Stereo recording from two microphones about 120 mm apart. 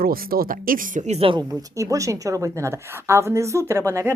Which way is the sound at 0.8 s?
85° right.